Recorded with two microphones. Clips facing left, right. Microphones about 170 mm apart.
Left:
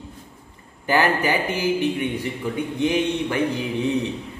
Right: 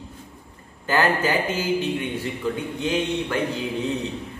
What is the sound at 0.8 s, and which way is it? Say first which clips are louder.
A man's voice: left 1 dB; 15° left (ahead or behind).